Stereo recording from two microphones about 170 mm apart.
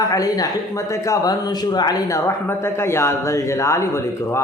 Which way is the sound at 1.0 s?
20° left (ahead or behind).